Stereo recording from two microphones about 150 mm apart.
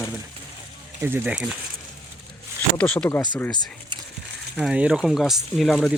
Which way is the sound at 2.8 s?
5° left (ahead or behind).